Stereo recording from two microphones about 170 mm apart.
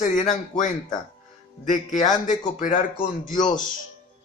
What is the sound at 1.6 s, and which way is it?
A man's voice, 50° left (ahead or behind).